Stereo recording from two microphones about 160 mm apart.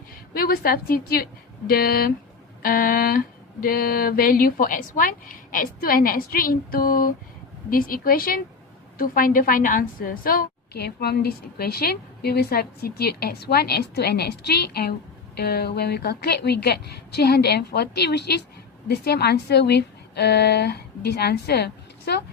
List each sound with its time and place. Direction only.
0.3 s a woman's voice: 70° left (ahead or behind)
2.6 s a sound: 65° left (ahead or behind)
9.0 s a woman's voice: 60° left (ahead or behind); by 22.2 s 90° left